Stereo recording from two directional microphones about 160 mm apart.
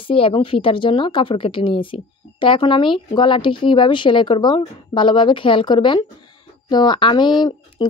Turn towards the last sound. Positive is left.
turn(degrees=30)  # may be behind; listen again after turning